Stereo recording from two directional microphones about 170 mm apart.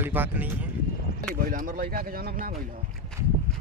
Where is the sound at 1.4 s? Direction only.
50° right (ahead or behind).